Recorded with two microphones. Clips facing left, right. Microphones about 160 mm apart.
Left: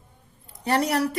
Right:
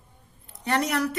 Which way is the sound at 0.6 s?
30° left (ahead or behind).